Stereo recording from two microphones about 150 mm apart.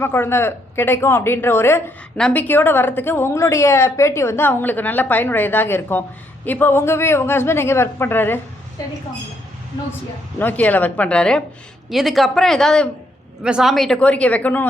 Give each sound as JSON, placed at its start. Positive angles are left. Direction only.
{"t": 0.0, "sound": "a woman's voice", "side_deg": 15}
{"t": 10.3, "sound": "a woman's voice", "side_deg": 10}